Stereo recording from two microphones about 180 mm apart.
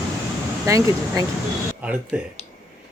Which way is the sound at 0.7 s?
20° right (ahead or behind).